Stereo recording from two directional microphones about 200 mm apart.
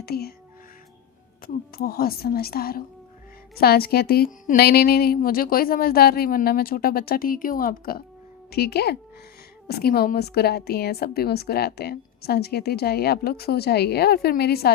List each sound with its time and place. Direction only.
0.0 s speech: 50° left (ahead or behind)
1.7 s a woman's voice: 50° left (ahead or behind)